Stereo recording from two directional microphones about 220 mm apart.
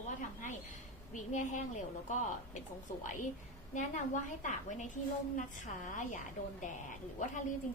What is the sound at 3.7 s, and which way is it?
A woman's voice, 35° left (ahead or behind).